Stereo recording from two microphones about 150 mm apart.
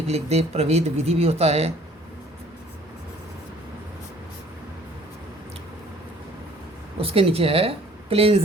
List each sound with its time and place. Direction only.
0.1 s speech: 45° right (ahead or behind)
7.0 s speech: 40° right (ahead or behind)